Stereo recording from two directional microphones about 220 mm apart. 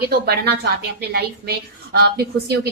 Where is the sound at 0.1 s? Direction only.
45° right (ahead or behind).